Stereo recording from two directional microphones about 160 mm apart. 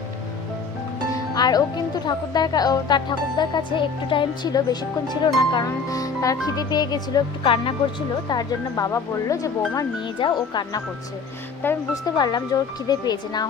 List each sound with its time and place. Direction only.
1.1 s music: 25° left (ahead or behind)
2.0 s speech: 25° left (ahead or behind)
11.6 s speech: 15° left (ahead or behind)
12.1 s speech: 25° left (ahead or behind)